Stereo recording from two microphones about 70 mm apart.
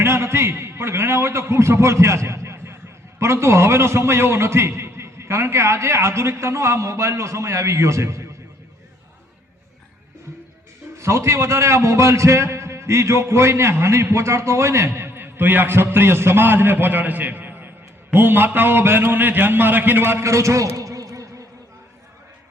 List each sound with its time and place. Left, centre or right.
0.0 s a man's voice: right
10.9 s a man's voice: right